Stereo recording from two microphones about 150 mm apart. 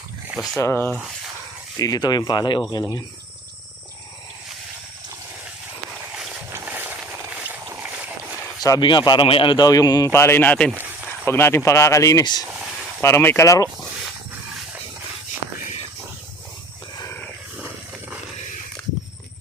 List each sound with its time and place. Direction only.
0.3 s speech: centre (ahead or behind)
0.6 s a man's voice: 15° left (ahead or behind)
6.5 s a sound: 10° right (ahead or behind)
8.6 s a man's voice: 30° left (ahead or behind); by 10.7 s 10° left (ahead or behind)
10.7 s a sound: 10° right (ahead or behind)
11.3 s a man's voice: 15° left (ahead or behind)
12.5 s a sound: 5° right (ahead or behind)
13.0 s speech: 15° left (ahead or behind)
17.0 s dog: 15° left (ahead or behind)